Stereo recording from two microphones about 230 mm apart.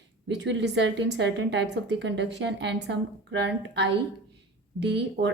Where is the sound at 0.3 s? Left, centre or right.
Right.